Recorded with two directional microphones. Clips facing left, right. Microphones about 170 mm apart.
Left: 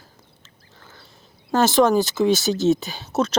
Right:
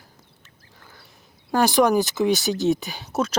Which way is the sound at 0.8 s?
10° right (ahead or behind).